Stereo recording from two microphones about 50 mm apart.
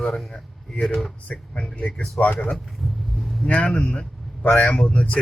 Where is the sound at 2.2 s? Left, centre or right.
Left.